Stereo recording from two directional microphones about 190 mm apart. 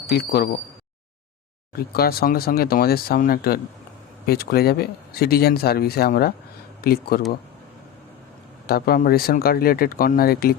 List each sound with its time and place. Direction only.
0.1 s speech: 50° left (ahead or behind)
1.9 s speech: 55° left (ahead or behind)
8.6 s speech: 50° left (ahead or behind)